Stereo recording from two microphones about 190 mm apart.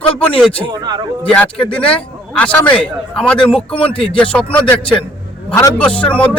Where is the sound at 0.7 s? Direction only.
20° right (ahead or behind).